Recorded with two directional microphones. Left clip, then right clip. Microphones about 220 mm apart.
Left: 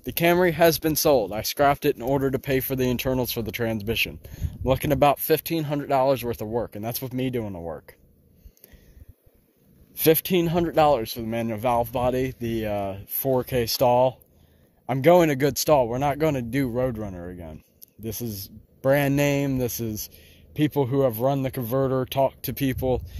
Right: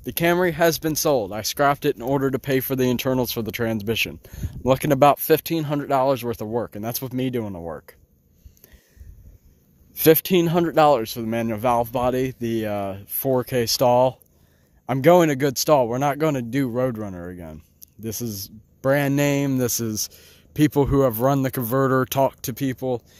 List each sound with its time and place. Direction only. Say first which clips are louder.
0.0 s speech: even; 15° right (ahead or behind)
9.9 s speech: right 4 dB; 30° right (ahead or behind)
22.5 s speech: even; 10° right (ahead or behind)